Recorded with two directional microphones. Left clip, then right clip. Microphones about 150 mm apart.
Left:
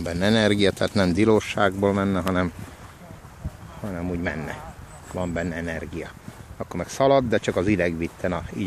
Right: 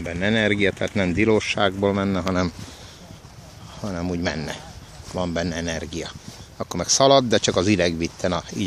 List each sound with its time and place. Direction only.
0.0 s speech: 20° left (ahead or behind)
1.3 s speech: 5° left (ahead or behind)
3.8 s speech: 20° right (ahead or behind)